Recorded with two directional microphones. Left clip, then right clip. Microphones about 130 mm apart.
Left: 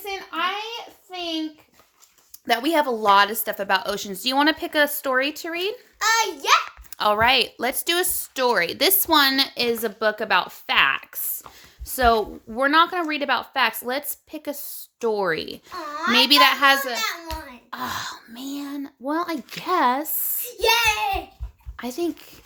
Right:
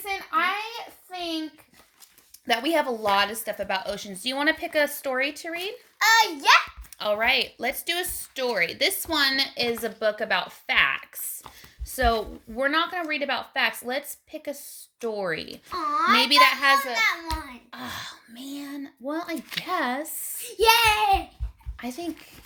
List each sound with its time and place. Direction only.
2.5 s speech: 45° left (ahead or behind); by 5.7 s 65° left (ahead or behind)
6.0 s a child's voice: 30° left (ahead or behind)
7.0 s speech: 60° left (ahead or behind)
15.7 s a child's voice: 30° left (ahead or behind)
16.1 s a child's voice: 65° left (ahead or behind)
17.7 s speech: 65° left (ahead or behind)
20.6 s a child's voice: 25° left (ahead or behind)
21.8 s speech: 65° left (ahead or behind)